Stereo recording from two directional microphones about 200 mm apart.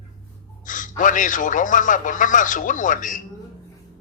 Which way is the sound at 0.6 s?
40° left (ahead or behind).